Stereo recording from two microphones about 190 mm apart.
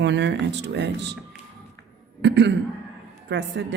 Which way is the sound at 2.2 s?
65° right (ahead or behind).